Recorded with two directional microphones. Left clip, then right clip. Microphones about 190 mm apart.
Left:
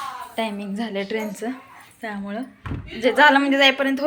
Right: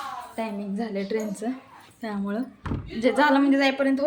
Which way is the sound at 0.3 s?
5° left (ahead or behind).